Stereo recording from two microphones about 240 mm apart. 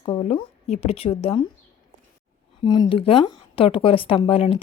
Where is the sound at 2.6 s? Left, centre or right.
Centre.